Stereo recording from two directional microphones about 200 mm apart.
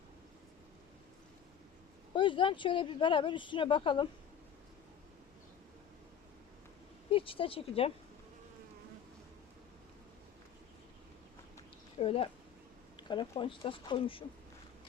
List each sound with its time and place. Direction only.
2.1 s speech: 25° left (ahead or behind)
7.1 s speech: 25° left (ahead or behind)
11.9 s speech: 30° left (ahead or behind)